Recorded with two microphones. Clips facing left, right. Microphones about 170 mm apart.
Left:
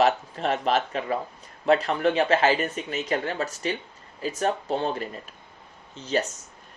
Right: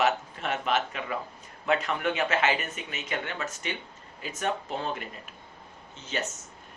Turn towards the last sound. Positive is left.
turn(degrees=35)  # may be behind; listen again after turning